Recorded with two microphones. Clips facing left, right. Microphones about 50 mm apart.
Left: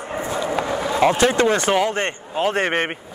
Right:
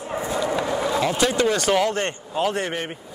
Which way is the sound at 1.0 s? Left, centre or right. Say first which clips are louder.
Left 7 dB; left.